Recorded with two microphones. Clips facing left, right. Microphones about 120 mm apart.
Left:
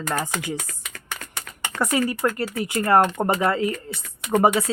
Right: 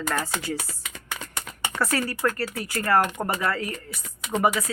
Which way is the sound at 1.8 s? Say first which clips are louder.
Left 3 dB; 15° left (ahead or behind).